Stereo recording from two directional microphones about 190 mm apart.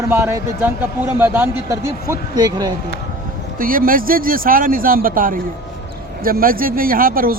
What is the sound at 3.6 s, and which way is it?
Speech, 50° right (ahead or behind).